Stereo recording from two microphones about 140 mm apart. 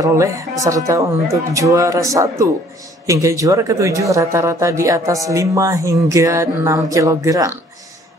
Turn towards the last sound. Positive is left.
turn(degrees=-25)  # may be behind; listen again after turning